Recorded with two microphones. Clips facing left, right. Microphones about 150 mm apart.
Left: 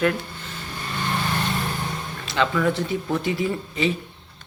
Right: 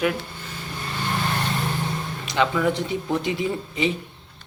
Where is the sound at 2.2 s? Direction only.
15° right (ahead or behind).